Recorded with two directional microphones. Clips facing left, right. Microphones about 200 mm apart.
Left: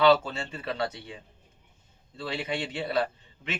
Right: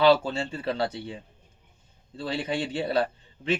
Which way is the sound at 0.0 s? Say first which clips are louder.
Right 1 dB; 30° right (ahead or behind).